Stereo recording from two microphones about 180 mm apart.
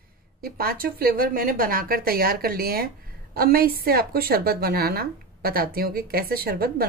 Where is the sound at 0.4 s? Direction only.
55° right (ahead or behind).